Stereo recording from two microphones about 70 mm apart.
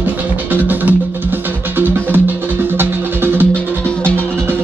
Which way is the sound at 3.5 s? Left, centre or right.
Centre.